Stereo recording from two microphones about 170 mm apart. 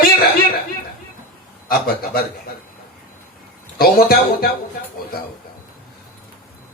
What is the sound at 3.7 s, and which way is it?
Speech, 60° left (ahead or behind).